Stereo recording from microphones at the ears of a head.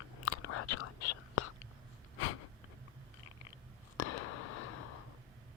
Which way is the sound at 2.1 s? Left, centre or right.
Left.